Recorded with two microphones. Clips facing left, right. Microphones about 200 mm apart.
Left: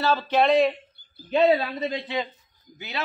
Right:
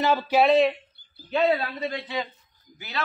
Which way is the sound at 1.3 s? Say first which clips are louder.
Left 3 dB; 20° left (ahead or behind).